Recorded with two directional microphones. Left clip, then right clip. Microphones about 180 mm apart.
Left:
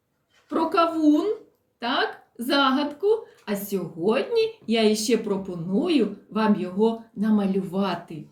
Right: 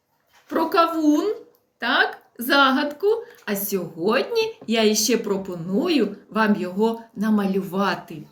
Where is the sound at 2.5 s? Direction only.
10° left (ahead or behind).